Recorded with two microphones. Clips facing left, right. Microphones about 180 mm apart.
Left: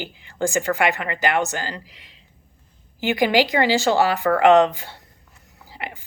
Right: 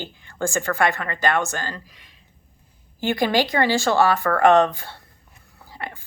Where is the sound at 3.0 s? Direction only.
15° left (ahead or behind).